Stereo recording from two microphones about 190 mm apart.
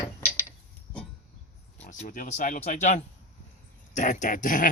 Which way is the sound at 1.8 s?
40° left (ahead or behind).